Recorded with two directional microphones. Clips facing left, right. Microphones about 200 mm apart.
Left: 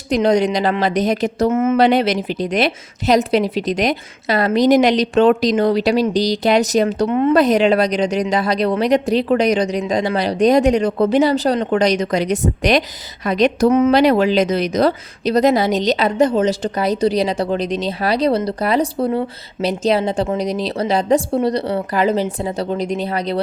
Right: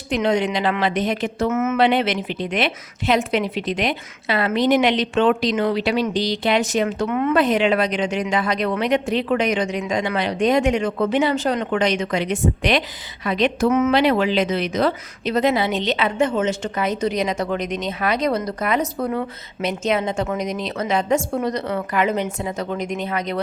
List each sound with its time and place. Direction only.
0.1 s a woman's voice: 40° left (ahead or behind)